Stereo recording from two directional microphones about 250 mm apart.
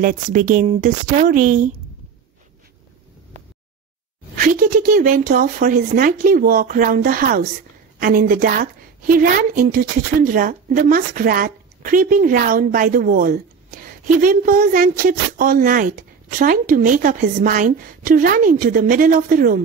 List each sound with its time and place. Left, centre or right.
0.0 s a woman's voice: right
4.6 s a woman's voice: right